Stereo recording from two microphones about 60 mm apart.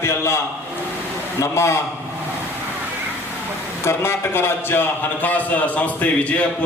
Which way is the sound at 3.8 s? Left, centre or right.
Left.